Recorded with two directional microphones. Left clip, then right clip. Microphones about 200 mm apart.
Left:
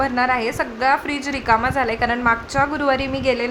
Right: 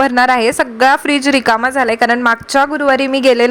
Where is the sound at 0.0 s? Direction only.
45° right (ahead or behind).